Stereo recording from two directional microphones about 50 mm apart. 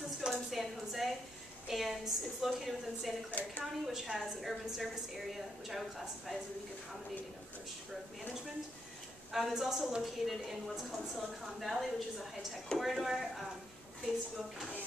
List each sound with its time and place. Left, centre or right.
0.3 s a woman's voice: centre
3.3 s a woman's voice: left
3.8 s a woman's voice: centre
9.3 s a woman's voice: centre